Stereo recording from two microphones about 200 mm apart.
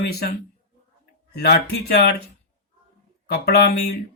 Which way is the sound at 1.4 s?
55° left (ahead or behind).